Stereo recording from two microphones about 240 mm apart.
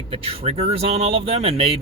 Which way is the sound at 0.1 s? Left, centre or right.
Right.